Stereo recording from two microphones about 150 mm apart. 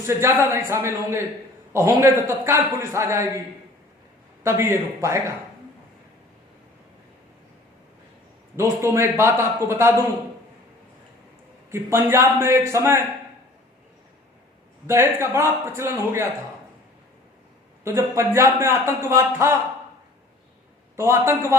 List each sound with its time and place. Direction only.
0.0 s a man's voice: 15° right (ahead or behind)
4.4 s a man's voice: 15° right (ahead or behind)
8.5 s a man's voice: 20° right (ahead or behind)
11.7 s a man's voice: 15° right (ahead or behind)
14.8 s a man's voice: 15° right (ahead or behind)
17.8 s a man's voice: 20° right (ahead or behind)
20.9 s a man's voice: 15° right (ahead or behind)